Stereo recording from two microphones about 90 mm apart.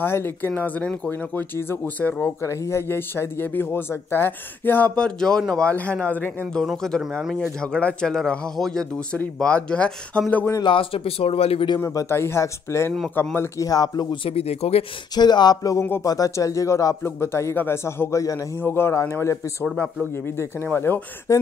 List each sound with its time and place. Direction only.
0.0 s speech: 25° left (ahead or behind)
2.4 s speech: 35° left (ahead or behind)
4.9 s speech: 10° left (ahead or behind)
6.6 s speech: 5° left (ahead or behind)
7.6 s speech: 10° left (ahead or behind)
10.6 s speech: 80° left
11.8 s speech: 40° left (ahead or behind)
12.1 s speech: 30° left (ahead or behind)
13.7 s speech: 45° left (ahead or behind)
14.2 s speech: 90° left
15.1 s speech: 50° left (ahead or behind); by 19.3 s 30° left (ahead or behind)
20.6 s speech: 20° left (ahead or behind)
21.3 s speech: 35° left (ahead or behind)